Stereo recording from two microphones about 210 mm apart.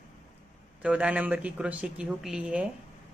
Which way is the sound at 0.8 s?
5° right (ahead or behind).